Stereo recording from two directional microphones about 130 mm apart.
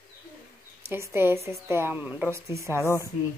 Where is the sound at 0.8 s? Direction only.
20° right (ahead or behind).